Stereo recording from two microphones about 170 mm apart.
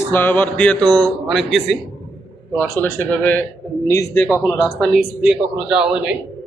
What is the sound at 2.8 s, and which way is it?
A man's voice, 10° left (ahead or behind).